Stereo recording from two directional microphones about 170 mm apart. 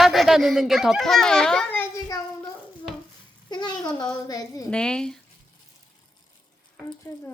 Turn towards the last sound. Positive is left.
turn(degrees=20)  # may be behind; listen again after turning